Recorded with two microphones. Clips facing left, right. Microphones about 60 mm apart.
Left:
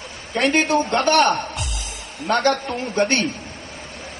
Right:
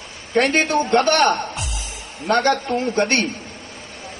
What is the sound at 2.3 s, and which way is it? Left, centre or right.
Speech, right.